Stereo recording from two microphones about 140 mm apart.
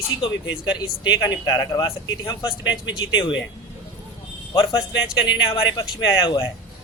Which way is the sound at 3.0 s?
35° left (ahead or behind).